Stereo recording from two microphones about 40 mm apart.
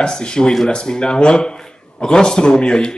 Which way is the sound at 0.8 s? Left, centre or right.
Left.